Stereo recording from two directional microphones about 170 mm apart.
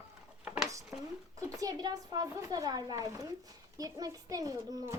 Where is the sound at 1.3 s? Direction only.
20° right (ahead or behind).